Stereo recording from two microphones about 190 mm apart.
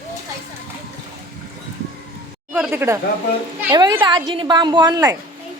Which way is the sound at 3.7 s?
20° right (ahead or behind).